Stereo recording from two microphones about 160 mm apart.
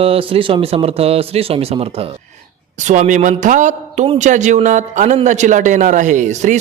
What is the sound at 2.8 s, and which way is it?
A man's voice, 50° right (ahead or behind).